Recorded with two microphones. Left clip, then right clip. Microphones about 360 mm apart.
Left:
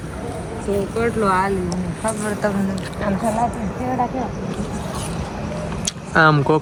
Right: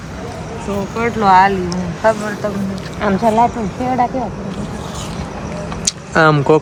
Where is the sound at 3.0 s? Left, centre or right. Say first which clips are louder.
Right 7 dB; centre.